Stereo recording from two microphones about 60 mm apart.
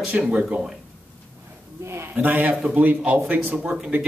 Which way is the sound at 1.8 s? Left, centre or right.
Right.